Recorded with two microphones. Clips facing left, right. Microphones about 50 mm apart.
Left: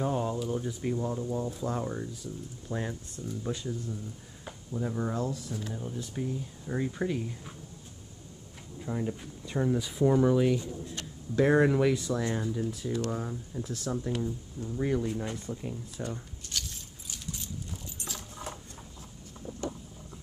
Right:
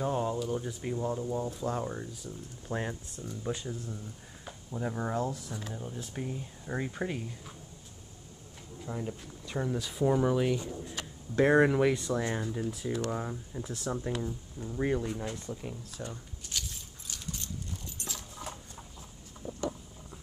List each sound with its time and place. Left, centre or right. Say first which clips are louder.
0.0 s speech: left 1 dB; centre
2.7 s speech: even; centre
8.7 s speech: left 4 dB; centre
15.0 s speech: left 3 dB; centre
16.0 s speech: left 4 dB; centre
16.5 s keys jangling: left 1 dB; centre
18.0 s a sound: left 2 dB; centre